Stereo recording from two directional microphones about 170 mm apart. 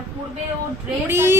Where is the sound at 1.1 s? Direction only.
15° right (ahead or behind).